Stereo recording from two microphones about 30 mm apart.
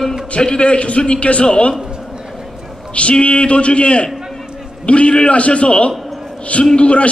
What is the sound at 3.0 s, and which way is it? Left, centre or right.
A man's voice, left.